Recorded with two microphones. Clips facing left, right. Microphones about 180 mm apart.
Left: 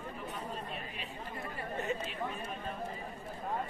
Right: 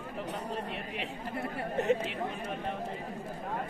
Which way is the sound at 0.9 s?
75° right (ahead or behind).